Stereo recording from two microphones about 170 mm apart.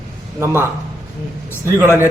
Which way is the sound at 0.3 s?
15° right (ahead or behind).